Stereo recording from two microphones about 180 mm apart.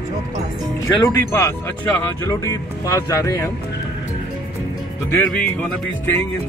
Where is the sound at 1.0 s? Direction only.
15° left (ahead or behind).